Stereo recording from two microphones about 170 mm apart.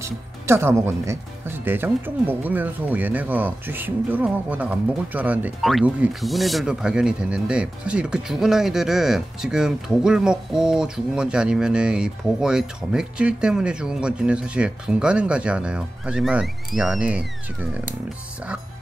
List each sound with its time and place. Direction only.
0.0 s speech: 15° right (ahead or behind)